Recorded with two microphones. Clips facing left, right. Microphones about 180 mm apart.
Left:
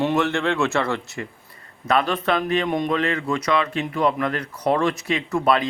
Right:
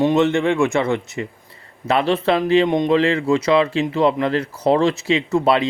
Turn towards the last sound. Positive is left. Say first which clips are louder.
# right 3 dB
turn(degrees=-25)  # may be behind; listen again after turning